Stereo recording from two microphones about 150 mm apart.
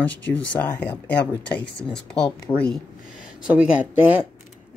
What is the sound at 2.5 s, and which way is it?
Speech, 35° left (ahead or behind).